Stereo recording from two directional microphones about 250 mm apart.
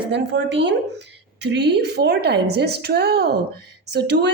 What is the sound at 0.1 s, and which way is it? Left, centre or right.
A woman's voice, right.